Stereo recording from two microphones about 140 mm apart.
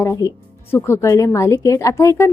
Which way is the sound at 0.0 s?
25° left (ahead or behind).